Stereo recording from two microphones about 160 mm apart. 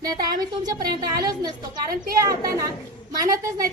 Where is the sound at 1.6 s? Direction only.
65° right (ahead or behind).